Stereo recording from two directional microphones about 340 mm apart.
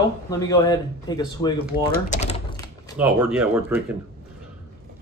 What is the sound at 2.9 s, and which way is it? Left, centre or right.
Speech, centre.